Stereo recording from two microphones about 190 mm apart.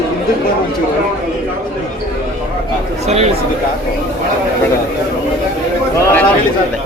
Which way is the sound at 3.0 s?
35° right (ahead or behind).